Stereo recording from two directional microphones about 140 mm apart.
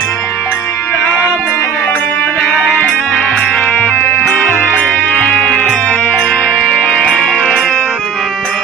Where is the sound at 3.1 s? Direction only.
5° left (ahead or behind).